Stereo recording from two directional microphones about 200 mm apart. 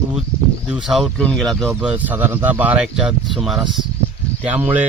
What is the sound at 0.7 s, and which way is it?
Speech, centre (ahead or behind).